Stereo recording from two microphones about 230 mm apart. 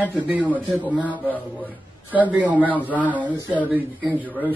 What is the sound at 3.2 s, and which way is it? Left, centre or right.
Speech, centre.